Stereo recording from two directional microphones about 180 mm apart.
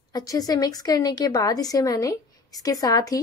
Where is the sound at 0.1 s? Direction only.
20° left (ahead or behind).